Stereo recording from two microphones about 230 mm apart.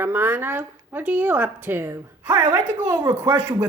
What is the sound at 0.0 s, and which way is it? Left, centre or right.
Speech, centre.